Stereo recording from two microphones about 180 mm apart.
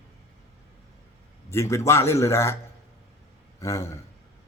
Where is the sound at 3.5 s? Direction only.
15° left (ahead or behind).